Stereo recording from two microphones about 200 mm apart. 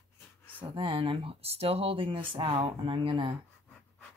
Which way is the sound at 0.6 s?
25° right (ahead or behind).